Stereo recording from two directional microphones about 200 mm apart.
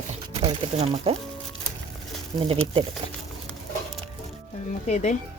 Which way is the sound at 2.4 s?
25° right (ahead or behind).